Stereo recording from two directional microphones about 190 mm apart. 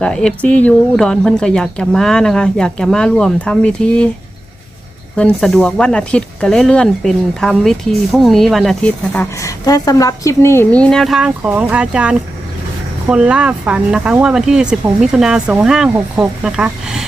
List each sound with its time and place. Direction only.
0.0 s speech: 5° left (ahead or behind)
5.1 s speech: 5° left (ahead or behind)